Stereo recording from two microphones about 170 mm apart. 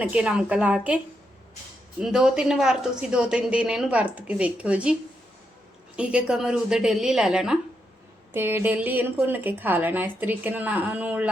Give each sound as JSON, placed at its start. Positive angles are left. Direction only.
{"t": 0.0, "sound": "a woman's voice", "side_deg": -10}
{"t": 2.0, "sound": "a woman's voice", "side_deg": -5}
{"t": 6.0, "sound": "a woman's voice", "side_deg": -5}